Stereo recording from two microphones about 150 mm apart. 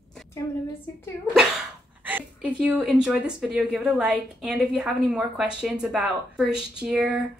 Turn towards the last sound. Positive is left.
turn(degrees=-10)  # may be behind; listen again after turning